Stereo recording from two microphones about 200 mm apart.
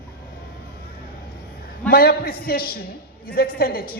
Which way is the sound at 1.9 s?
50° left (ahead or behind).